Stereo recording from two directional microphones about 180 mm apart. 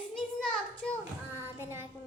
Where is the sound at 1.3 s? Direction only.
15° right (ahead or behind).